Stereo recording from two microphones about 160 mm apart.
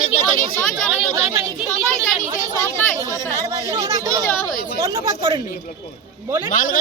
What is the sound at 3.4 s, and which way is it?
Speech, 20° right (ahead or behind).